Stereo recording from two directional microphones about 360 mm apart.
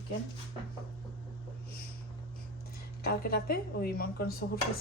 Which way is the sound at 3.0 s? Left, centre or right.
Left.